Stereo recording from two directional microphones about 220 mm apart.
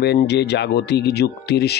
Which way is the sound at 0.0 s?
50° left (ahead or behind).